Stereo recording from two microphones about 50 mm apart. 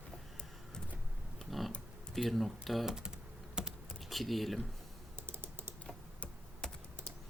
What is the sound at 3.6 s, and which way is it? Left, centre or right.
Computer keyboard, centre.